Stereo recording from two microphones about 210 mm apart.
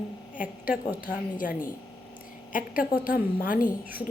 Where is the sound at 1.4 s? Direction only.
40° left (ahead or behind).